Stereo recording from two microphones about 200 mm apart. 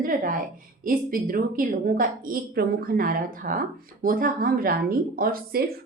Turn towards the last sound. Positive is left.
turn(degrees=-50)  # may be behind; listen again after turning